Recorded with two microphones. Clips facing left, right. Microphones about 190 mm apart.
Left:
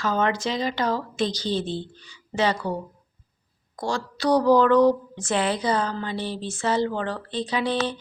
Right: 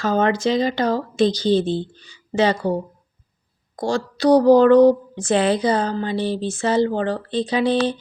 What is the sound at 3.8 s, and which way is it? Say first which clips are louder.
Speech: right 6 dB; 40° right (ahead or behind).